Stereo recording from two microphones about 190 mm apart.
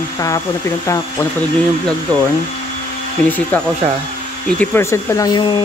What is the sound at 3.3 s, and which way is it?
Speech, 10° left (ahead or behind).